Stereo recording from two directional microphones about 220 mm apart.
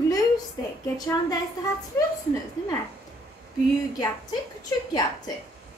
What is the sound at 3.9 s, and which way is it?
Speech, 15° left (ahead or behind).